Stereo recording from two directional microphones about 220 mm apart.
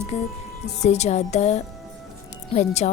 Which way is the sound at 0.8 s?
30° left (ahead or behind).